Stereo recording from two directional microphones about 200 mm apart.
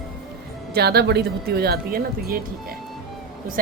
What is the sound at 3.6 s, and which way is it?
Speech, 45° right (ahead or behind).